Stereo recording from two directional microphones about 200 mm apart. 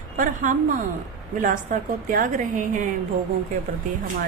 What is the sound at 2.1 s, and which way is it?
Speech, 40° right (ahead or behind).